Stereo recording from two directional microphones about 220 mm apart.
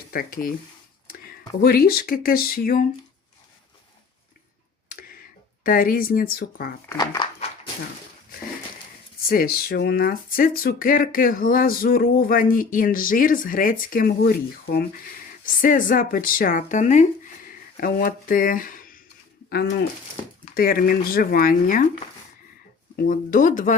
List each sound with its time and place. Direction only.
0.1 s speech: 40° left (ahead or behind)
4.9 s tick: 40° left (ahead or behind)
5.6 s speech: 40° left (ahead or behind)
6.8 s speech: 15° left (ahead or behind)
9.3 s speech: 40° left (ahead or behind)
20.4 s speech: 40° left (ahead or behind)
23.0 s speech: 35° left (ahead or behind)